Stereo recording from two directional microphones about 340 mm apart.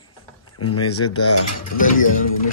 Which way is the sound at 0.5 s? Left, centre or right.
Left.